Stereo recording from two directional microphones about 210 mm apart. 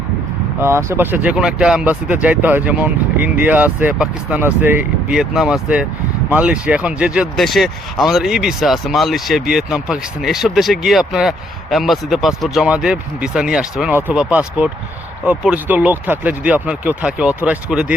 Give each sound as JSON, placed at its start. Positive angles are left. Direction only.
{"t": 0.6, "sound": "speech", "side_deg": -10}